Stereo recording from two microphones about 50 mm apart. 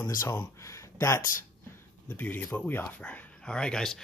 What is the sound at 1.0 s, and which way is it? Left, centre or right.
Speech, left.